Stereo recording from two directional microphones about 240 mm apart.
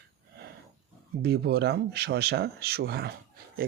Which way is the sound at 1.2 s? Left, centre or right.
Right.